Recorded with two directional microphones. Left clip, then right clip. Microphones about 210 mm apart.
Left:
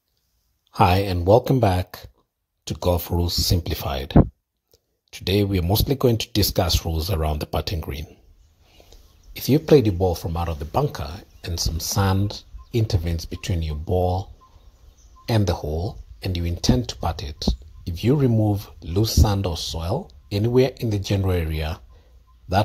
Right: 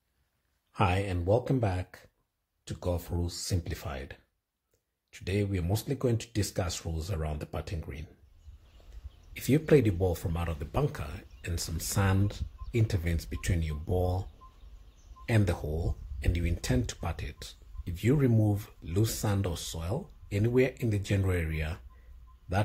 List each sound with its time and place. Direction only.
0.7 s speech: 25° left (ahead or behind)
5.1 s speech: 25° left (ahead or behind)
9.3 s speech: 15° left (ahead or behind)
15.2 s speech: 15° left (ahead or behind)